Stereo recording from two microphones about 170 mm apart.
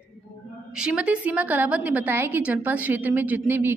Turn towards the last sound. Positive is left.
turn(degrees=-10)  # may be behind; listen again after turning